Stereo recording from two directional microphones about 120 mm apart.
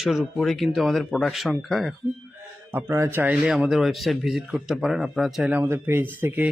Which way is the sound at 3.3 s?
5° right (ahead or behind).